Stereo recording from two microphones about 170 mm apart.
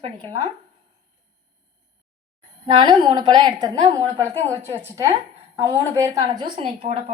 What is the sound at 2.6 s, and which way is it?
A woman's voice, 25° right (ahead or behind).